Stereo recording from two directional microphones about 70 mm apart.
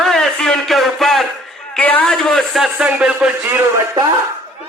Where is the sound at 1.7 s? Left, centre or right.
Left.